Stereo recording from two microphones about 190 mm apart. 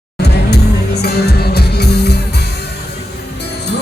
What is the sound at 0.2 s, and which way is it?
Music, 60° left (ahead or behind).